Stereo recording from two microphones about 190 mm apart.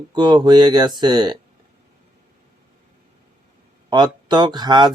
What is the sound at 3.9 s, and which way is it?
Speech, 25° right (ahead or behind).